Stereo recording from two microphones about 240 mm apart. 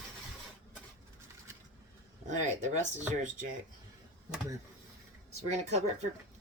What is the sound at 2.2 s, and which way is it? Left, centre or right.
Speech, right.